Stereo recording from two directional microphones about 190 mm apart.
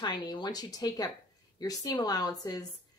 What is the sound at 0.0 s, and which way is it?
Speech, 20° left (ahead or behind).